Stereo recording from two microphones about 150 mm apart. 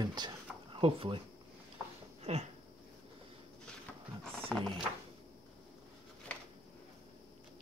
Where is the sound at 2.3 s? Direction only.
45° right (ahead or behind).